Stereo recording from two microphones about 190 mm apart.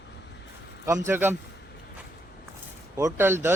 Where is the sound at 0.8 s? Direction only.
15° right (ahead or behind).